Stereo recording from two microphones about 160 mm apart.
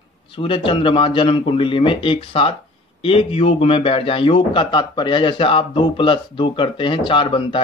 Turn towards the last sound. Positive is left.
turn(degrees=30)  # may be behind; listen again after turning